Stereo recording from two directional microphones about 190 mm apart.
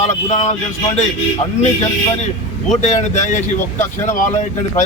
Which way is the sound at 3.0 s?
40° left (ahead or behind).